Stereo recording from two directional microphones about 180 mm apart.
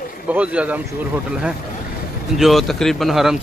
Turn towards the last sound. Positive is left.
turn(degrees=0)  # may be behind; listen again after turning